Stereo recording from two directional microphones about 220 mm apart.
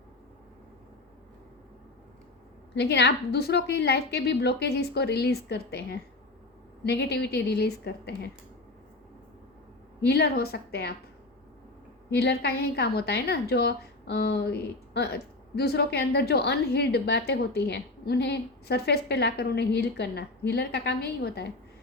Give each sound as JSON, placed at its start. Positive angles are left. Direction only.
{"t": 2.7, "sound": "a woman's voice", "side_deg": 50}
{"t": 10.1, "sound": "a woman's voice", "side_deg": 45}
{"t": 12.1, "sound": "a woman's voice", "side_deg": 50}